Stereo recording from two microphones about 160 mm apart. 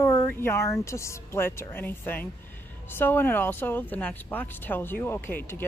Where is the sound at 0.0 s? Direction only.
20° left (ahead or behind).